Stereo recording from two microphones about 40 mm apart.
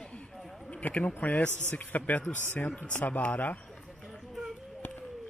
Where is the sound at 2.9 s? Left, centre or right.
Left.